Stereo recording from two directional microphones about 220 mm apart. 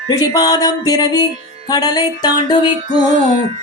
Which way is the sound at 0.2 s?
15° left (ahead or behind).